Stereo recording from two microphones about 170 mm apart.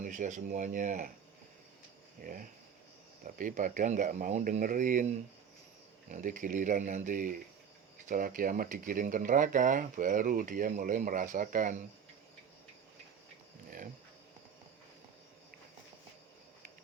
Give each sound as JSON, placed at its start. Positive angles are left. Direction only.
{"t": 0.0, "sound": "speech", "side_deg": -50}
{"t": 2.2, "sound": "speech", "side_deg": -55}
{"t": 13.7, "sound": "a sound", "side_deg": -55}